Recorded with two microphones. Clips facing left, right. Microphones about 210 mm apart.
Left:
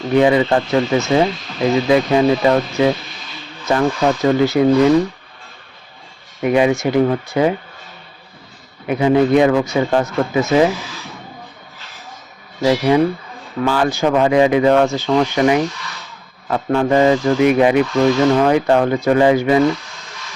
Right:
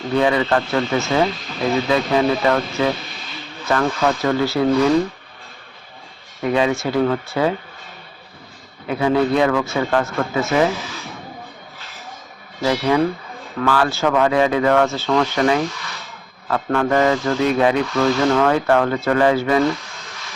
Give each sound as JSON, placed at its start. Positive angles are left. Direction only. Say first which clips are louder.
{"t": 0.1, "sound": "speech", "louder": "left 4 dB", "side_deg": 20}
{"t": 6.4, "sound": "speech", "louder": "left 4 dB", "side_deg": 20}
{"t": 8.9, "sound": "speech", "louder": "left 4 dB", "side_deg": 20}
{"t": 12.6, "sound": "speech", "louder": "left 4 dB", "side_deg": 20}